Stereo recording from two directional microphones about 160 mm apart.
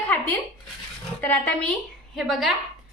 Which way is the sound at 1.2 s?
10° left (ahead or behind).